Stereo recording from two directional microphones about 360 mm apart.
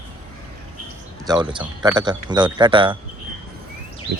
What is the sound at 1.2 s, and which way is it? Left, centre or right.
Speech, centre.